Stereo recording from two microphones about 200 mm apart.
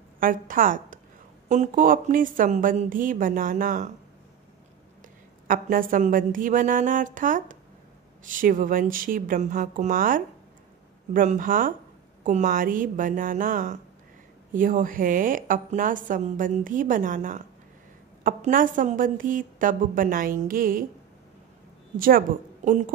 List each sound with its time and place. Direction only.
0.2 s a woman's voice: 45° right (ahead or behind)
5.5 s a woman's voice: 45° right (ahead or behind)
21.9 s speech: 45° right (ahead or behind)